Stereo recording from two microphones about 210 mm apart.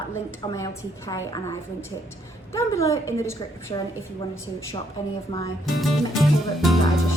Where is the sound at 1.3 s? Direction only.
15° left (ahead or behind).